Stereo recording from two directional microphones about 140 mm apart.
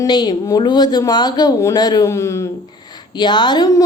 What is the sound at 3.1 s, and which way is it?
Speech, 30° left (ahead or behind).